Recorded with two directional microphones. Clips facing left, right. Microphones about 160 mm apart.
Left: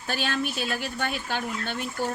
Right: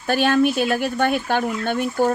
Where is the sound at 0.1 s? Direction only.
50° right (ahead or behind).